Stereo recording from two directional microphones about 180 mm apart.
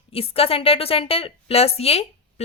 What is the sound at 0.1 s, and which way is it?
A woman's voice, 30° left (ahead or behind).